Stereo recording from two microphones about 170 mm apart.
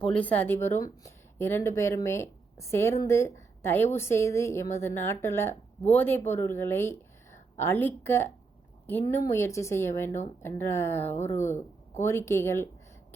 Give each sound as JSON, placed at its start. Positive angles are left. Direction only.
{"t": 0.1, "sound": "a woman's voice", "side_deg": 10}